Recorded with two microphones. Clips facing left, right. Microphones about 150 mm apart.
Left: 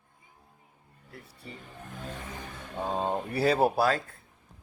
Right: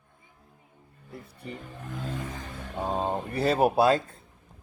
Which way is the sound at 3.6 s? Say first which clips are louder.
Right 2 dB; 15° right (ahead or behind).